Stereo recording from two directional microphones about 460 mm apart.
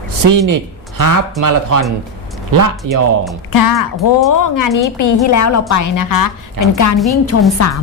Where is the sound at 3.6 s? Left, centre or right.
Left.